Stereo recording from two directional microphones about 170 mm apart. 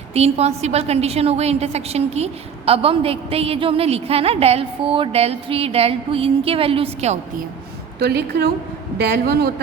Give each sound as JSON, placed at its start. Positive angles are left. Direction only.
{"t": 0.1, "sound": "a woman's voice", "side_deg": -35}
{"t": 7.9, "sound": "a woman's voice", "side_deg": -70}